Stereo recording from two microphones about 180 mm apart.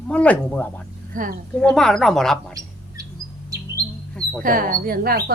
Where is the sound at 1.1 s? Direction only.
50° right (ahead or behind).